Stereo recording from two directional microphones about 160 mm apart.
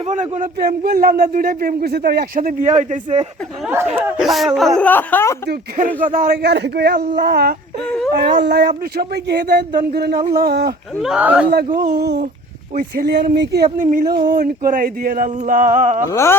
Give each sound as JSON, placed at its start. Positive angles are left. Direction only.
{"t": 0.0, "sound": "a man's voice", "side_deg": -50}
{"t": 2.4, "sound": "speech", "side_deg": -55}
{"t": 3.7, "sound": "speech", "side_deg": -15}
{"t": 4.2, "sound": "speech", "side_deg": 0}
{"t": 4.9, "sound": "speech", "side_deg": 10}
{"t": 6.1, "sound": "speech", "side_deg": -70}
{"t": 7.9, "sound": "a sound", "side_deg": 5}
{"t": 8.1, "sound": "speech", "side_deg": -90}
{"t": 10.4, "sound": "speech", "side_deg": -90}
{"t": 11.0, "sound": "speech", "side_deg": -5}
{"t": 11.8, "sound": "speech", "side_deg": -85}
{"t": 13.7, "sound": "speech", "side_deg": -50}
{"t": 16.0, "sound": "speech", "side_deg": 15}